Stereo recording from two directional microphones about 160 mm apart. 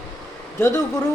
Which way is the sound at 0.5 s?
15° left (ahead or behind).